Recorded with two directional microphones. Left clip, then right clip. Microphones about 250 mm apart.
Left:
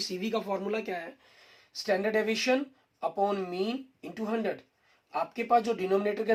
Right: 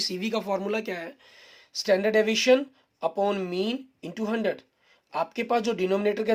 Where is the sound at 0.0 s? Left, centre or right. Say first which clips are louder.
Right 3 dB; right.